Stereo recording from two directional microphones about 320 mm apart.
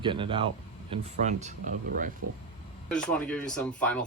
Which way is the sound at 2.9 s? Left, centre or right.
Centre.